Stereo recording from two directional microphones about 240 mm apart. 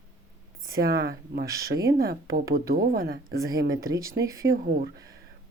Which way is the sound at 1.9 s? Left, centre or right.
Right.